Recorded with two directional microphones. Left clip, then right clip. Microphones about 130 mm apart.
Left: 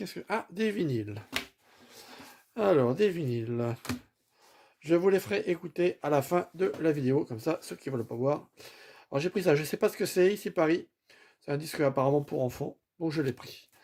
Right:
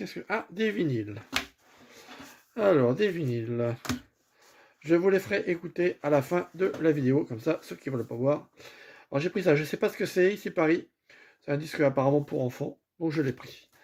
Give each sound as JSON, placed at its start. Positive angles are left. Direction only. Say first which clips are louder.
{"t": 0.0, "sound": "speech", "louder": "right 1 dB", "side_deg": 25}
{"t": 2.6, "sound": "speech", "louder": "right 2 dB", "side_deg": 20}
{"t": 4.8, "sound": "speech", "louder": "right 1 dB", "side_deg": 20}